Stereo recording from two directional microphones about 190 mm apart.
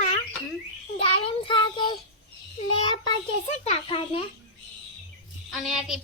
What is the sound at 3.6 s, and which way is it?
Speech, 30° left (ahead or behind).